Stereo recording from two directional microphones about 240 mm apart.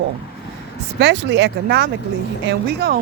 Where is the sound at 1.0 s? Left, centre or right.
Right.